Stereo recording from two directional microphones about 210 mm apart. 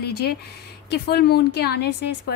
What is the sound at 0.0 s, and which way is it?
Speech, 50° left (ahead or behind).